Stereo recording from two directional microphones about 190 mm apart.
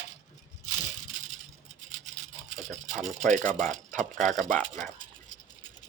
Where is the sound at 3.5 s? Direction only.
45° right (ahead or behind).